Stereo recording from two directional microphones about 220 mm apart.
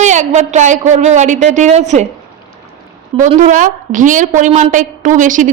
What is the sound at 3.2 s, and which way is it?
A woman's voice, 35° right (ahead or behind).